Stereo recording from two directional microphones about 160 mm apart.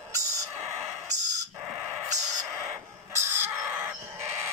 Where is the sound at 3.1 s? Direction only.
15° right (ahead or behind).